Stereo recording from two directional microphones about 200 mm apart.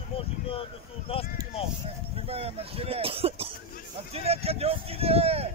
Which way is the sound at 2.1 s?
30° right (ahead or behind).